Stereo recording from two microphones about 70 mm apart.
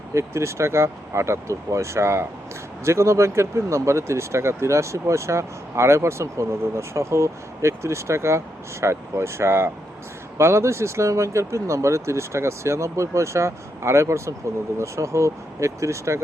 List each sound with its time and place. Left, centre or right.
0.1 s speech: right